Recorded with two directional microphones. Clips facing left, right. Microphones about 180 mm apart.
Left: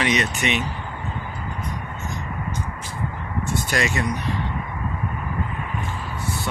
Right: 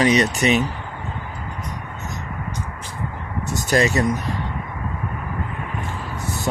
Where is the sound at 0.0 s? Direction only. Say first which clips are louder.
Right 5 dB; 35° right (ahead or behind).